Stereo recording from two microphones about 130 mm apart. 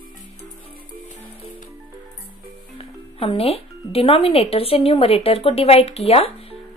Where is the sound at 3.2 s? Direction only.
45° left (ahead or behind).